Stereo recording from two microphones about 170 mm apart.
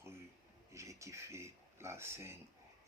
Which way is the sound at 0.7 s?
15° right (ahead or behind).